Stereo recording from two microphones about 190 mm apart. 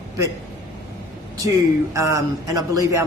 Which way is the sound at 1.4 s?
15° right (ahead or behind).